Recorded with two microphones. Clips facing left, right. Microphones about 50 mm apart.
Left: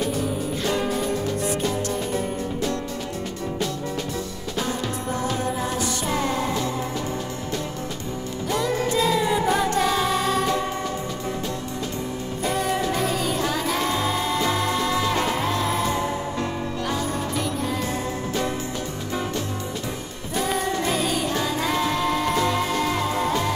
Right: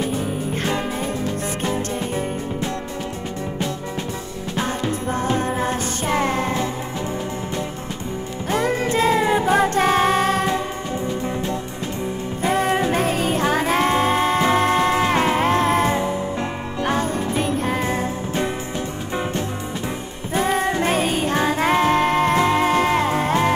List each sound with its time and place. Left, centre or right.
0.0 s music: right
4.6 s music: right
8.5 s music: right
12.4 s music: right
20.3 s music: right